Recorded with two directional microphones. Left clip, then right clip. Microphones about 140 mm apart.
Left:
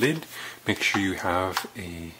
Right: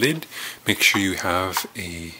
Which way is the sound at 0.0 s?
10° right (ahead or behind).